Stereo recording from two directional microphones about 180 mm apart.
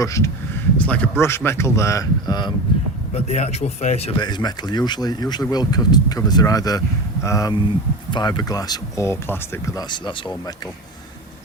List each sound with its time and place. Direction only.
0.0 s speech: 15° left (ahead or behind)
3.1 s speech: 35° left (ahead or behind)